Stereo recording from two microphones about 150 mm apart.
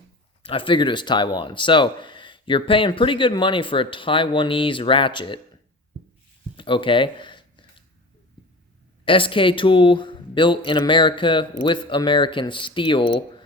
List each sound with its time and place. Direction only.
0.4 s speech: 35° left (ahead or behind)
6.6 s a sound: 35° left (ahead or behind)
9.0 s speech: 35° left (ahead or behind)